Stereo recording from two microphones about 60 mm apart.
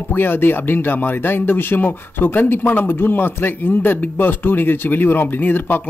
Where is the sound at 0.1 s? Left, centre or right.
Left.